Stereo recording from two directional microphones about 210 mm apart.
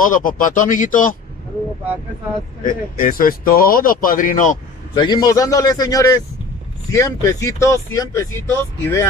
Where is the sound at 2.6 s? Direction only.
40° left (ahead or behind).